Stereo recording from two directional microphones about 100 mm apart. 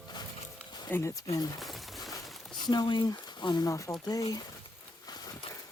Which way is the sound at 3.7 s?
30° left (ahead or behind).